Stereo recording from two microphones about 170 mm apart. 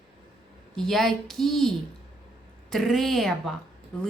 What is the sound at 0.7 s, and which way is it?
Speech, centre (ahead or behind).